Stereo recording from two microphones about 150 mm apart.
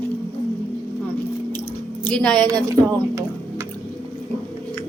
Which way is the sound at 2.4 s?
25° right (ahead or behind).